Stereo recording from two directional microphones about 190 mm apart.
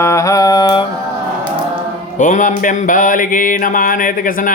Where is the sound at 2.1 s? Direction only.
45° left (ahead or behind).